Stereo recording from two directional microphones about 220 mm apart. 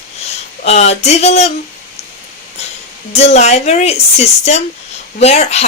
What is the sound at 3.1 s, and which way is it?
Speech, 30° left (ahead or behind).